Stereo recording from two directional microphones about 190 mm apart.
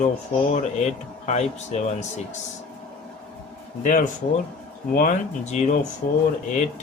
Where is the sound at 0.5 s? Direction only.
35° left (ahead or behind).